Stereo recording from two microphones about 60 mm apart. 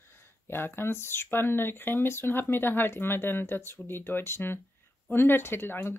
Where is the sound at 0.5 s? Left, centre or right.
Left.